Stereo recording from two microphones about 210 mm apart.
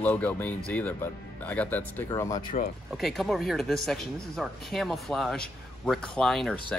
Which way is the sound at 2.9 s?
Centre (ahead or behind).